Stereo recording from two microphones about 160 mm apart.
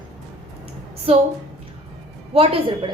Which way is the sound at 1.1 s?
40° right (ahead or behind).